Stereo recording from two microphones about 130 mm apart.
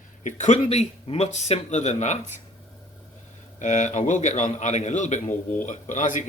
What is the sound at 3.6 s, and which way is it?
Speech, 70° left (ahead or behind).